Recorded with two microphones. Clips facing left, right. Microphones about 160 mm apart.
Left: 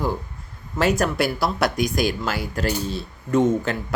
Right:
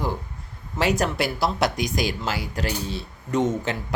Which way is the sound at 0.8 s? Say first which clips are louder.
Left 2 dB; 20° right (ahead or behind).